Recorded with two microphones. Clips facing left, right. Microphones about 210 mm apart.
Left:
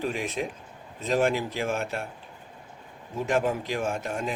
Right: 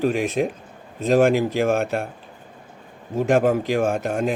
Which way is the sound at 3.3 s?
70° right (ahead or behind).